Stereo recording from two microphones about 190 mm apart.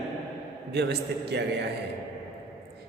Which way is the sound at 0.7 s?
60° right (ahead or behind).